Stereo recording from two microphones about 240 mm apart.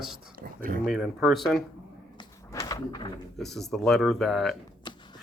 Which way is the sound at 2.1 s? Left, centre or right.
Centre.